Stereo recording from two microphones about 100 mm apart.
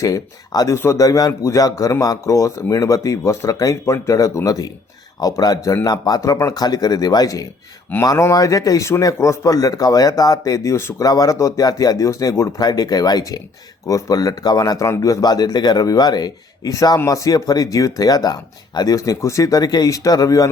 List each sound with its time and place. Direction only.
0.0 s speech: 35° left (ahead or behind)